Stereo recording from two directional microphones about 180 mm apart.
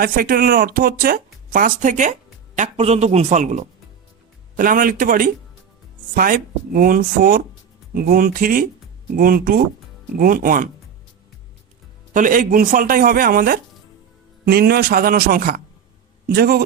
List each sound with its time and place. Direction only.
0.0 s speech: 55° right (ahead or behind)
2.6 s speech: 35° right (ahead or behind); by 10.7 s 50° right (ahead or behind)
12.1 s speech: 45° right (ahead or behind)